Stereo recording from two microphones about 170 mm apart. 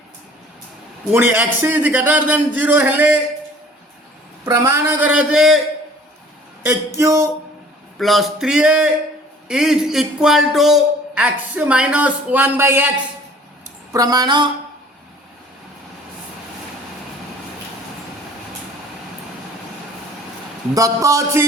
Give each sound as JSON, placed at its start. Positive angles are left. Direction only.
{"t": 1.1, "sound": "a man's voice", "side_deg": -10}
{"t": 4.4, "sound": "a man's voice", "side_deg": -20}
{"t": 6.7, "sound": "a man's voice", "side_deg": -15}
{"t": 7.9, "sound": "speech", "side_deg": 0}
{"t": 13.9, "sound": "a man's voice", "side_deg": -20}
{"t": 20.7, "sound": "a man's voice", "side_deg": -20}